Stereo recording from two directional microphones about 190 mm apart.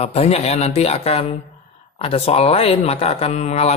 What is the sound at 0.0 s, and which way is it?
Speech, 35° left (ahead or behind).